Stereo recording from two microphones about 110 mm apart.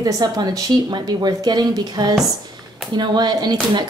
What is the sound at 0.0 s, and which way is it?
Speech, 35° right (ahead or behind).